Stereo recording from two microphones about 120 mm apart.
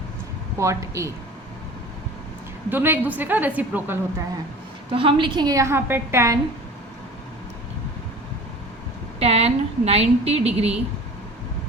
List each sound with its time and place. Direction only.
0.6 s speech: 25° right (ahead or behind)
2.6 s a woman's voice: 15° right (ahead or behind)
4.9 s a woman's voice: 45° right (ahead or behind); by 6.4 s 25° right (ahead or behind)
9.1 s a woman's voice: 60° right (ahead or behind)